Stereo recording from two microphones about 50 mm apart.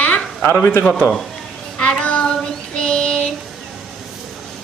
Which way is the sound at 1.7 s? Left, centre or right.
Left.